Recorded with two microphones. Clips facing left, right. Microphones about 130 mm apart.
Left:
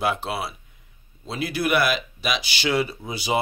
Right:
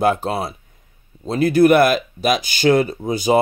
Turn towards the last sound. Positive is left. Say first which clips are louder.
# right 9 dB
turn(degrees=-45)  # may be behind; listen again after turning